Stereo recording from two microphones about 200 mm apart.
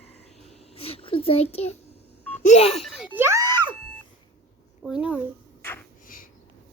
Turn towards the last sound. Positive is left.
turn(degrees=10)  # may be behind; listen again after turning